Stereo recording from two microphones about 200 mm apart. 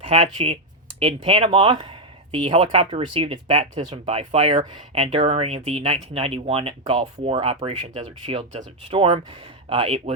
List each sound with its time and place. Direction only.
0.0 s speech: 30° right (ahead or behind)